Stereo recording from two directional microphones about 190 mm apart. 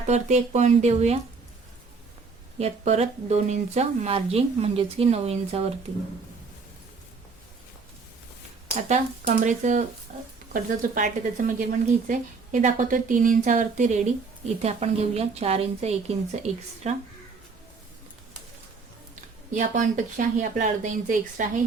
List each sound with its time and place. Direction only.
0.1 s a woman's voice: 40° right (ahead or behind)
2.6 s a woman's voice: 35° right (ahead or behind)
8.9 s a woman's voice: 40° right (ahead or behind)
19.5 s speech: 45° right (ahead or behind)